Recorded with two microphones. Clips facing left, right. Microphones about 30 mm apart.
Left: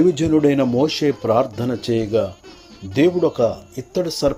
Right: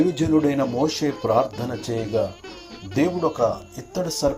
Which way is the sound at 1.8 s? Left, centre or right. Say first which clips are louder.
Left 8 dB; left.